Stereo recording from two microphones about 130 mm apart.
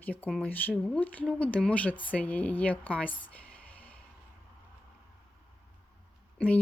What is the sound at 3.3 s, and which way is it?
Music, 10° left (ahead or behind).